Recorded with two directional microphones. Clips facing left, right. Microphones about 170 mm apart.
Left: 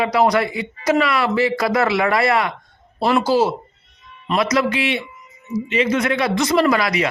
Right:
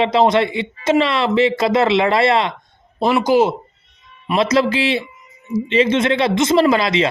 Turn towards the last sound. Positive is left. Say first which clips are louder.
# right 3 dB
turn(degrees=-25)  # may be behind; listen again after turning